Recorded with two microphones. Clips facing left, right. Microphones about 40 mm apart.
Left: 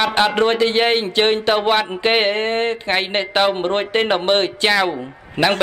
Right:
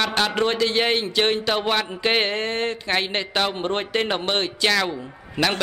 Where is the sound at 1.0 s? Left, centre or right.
Left.